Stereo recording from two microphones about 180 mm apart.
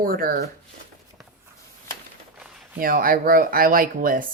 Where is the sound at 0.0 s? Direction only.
50° right (ahead or behind).